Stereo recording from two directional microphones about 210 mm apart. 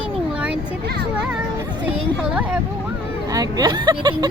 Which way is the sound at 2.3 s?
5° right (ahead or behind).